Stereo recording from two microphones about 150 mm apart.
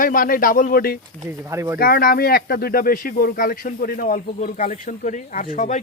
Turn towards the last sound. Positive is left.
turn(degrees=55)  # may be behind; listen again after turning